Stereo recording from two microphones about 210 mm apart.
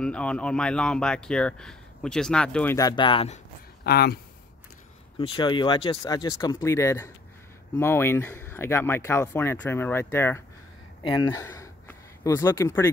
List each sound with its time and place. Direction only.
0.0 s speech: 5° left (ahead or behind); by 3.3 s 25° left (ahead or behind)
3.8 s speech: 50° left (ahead or behind)
5.2 s speech: 25° left (ahead or behind)